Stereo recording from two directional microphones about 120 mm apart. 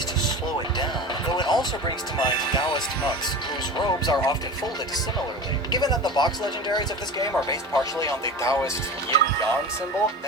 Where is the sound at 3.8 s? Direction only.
35° left (ahead or behind).